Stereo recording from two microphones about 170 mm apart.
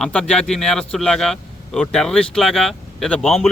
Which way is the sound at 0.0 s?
5° left (ahead or behind).